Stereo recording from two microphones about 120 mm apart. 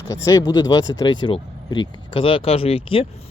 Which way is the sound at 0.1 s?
30° left (ahead or behind).